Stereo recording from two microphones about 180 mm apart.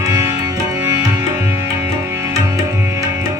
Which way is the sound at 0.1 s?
15° right (ahead or behind).